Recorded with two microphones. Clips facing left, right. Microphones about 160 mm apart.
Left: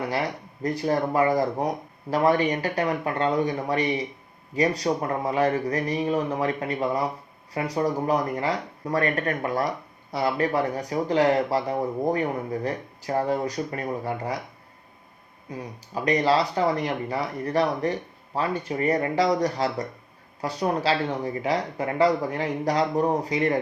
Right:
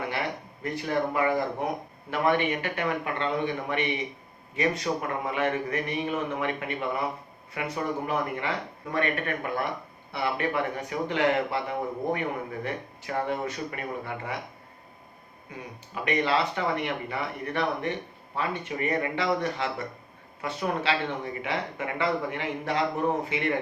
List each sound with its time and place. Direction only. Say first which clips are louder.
0.6 s speech: left 4 dB; 40° left (ahead or behind)
15.5 s speech: left 6 dB; 35° left (ahead or behind)